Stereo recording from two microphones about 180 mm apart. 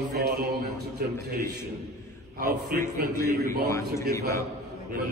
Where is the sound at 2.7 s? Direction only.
55° right (ahead or behind).